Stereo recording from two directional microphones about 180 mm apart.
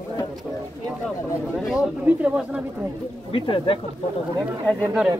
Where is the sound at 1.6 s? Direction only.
Centre (ahead or behind).